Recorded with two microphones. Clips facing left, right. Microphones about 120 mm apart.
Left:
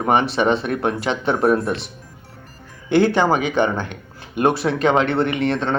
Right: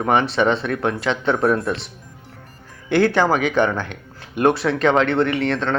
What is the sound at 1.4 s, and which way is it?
Speech, 25° left (ahead or behind).